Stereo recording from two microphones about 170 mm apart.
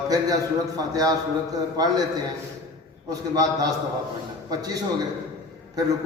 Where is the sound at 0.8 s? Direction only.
20° right (ahead or behind).